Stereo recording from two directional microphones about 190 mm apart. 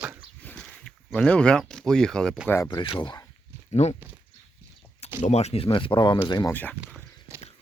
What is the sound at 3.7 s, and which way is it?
Speech, 35° left (ahead or behind).